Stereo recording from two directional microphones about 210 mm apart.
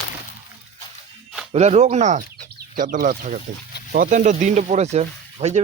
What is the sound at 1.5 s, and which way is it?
Speech, 30° right (ahead or behind).